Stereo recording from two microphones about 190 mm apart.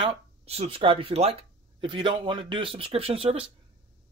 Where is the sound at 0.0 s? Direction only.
30° right (ahead or behind).